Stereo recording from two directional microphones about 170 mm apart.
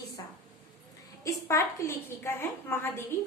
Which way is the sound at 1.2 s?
15° left (ahead or behind).